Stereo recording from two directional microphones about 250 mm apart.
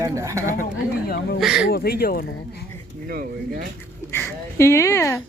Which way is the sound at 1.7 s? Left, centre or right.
Left.